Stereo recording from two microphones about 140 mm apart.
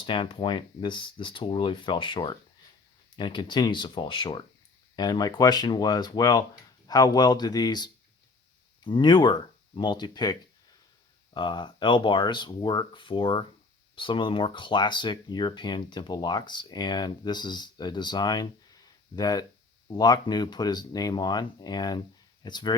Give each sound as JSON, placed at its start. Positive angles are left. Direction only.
{"t": 0.0, "sound": "speech", "side_deg": 35}
{"t": 11.3, "sound": "speech", "side_deg": 35}